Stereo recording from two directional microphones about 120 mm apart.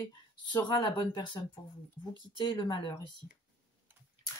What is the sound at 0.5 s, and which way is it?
Speech, 40° left (ahead or behind).